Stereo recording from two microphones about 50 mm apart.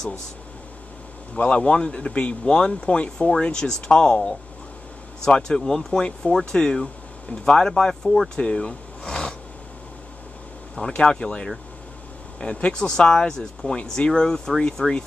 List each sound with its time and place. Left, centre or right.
1.3 s speech: left; by 8.3 s centre
8.4 s a sound: centre
11.0 s speech: centre